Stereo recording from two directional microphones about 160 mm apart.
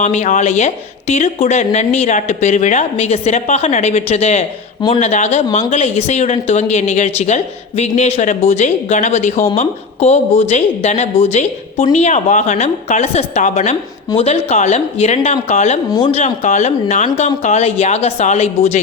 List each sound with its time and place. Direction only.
0.0 s speech: 45° left (ahead or behind)